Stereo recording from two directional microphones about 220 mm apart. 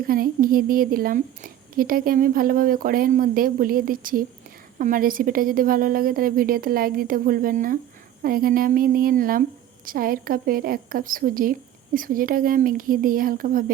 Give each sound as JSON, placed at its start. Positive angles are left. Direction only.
{"t": 0.0, "sound": "a woman's voice", "side_deg": -40}